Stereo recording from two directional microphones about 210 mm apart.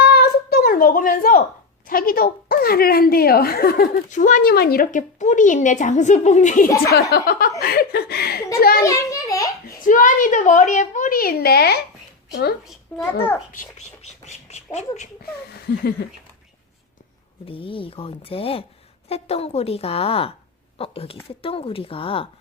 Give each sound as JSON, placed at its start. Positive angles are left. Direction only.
{"t": 0.0, "sound": "a sound", "side_deg": 50}
{"t": 1.9, "sound": "a woman's voice", "side_deg": 45}
{"t": 6.9, "sound": "a woman's voice", "side_deg": 50}
{"t": 8.8, "sound": "a sound", "side_deg": 15}
{"t": 9.8, "sound": "a woman's voice", "side_deg": 40}
{"t": 12.9, "sound": "a child's voice", "side_deg": 5}
{"t": 13.5, "sound": "a woman's voice", "side_deg": 35}
{"t": 15.8, "sound": "a woman's voice", "side_deg": 50}
{"t": 17.4, "sound": "a woman's voice", "side_deg": 25}